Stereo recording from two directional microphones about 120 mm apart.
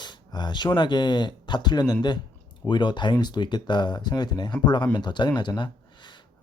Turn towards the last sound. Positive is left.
turn(degrees=40)  # may be behind; listen again after turning